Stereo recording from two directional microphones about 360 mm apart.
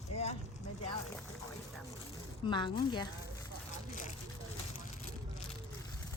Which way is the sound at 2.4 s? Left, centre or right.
Centre.